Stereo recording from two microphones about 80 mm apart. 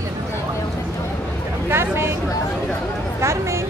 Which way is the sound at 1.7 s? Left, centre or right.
Right.